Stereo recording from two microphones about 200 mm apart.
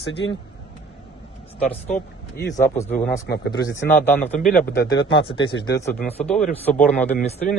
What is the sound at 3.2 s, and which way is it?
Speech, 55° left (ahead or behind).